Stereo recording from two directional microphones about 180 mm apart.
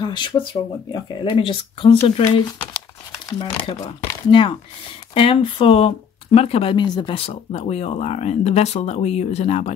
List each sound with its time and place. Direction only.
0.0 s speech: 25° left (ahead or behind)